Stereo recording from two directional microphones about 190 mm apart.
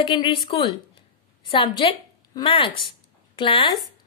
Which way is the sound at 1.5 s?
25° left (ahead or behind).